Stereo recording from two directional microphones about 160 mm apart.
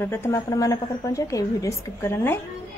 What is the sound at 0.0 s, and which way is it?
A woman's voice, 15° left (ahead or behind).